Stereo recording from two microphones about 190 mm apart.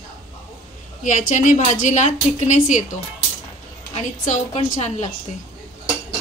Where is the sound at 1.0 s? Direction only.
40° left (ahead or behind).